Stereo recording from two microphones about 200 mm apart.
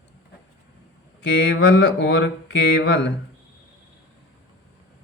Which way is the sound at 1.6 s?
70° left (ahead or behind).